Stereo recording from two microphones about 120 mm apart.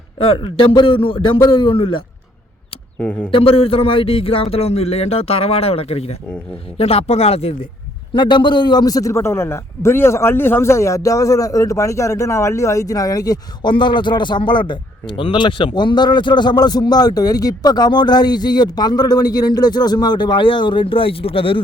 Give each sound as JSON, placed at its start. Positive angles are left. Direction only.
{"t": 0.2, "sound": "a man's voice", "side_deg": 45}
{"t": 3.0, "sound": "speech", "side_deg": 10}
{"t": 3.3, "sound": "speech", "side_deg": 50}
{"t": 8.1, "sound": "a man's voice", "side_deg": 40}